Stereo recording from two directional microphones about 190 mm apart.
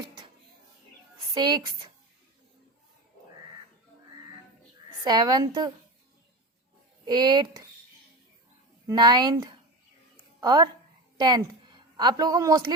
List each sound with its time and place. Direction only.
1.3 s a woman's voice: 20° right (ahead or behind)
5.0 s a woman's voice: 20° right (ahead or behind)
7.0 s a woman's voice: 20° right (ahead or behind)
8.9 s a woman's voice: 20° right (ahead or behind)